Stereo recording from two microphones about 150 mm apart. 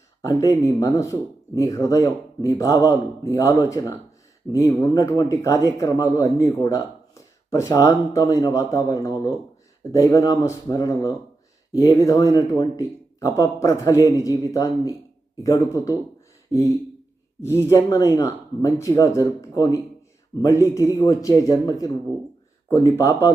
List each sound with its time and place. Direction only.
0.2 s speech: 20° left (ahead or behind)
17.7 s speech: 20° left (ahead or behind)